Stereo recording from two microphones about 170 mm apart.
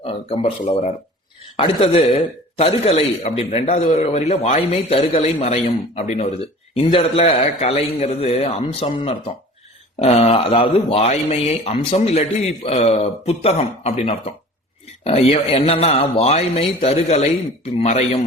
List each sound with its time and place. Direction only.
0.0 s speech: 35° left (ahead or behind)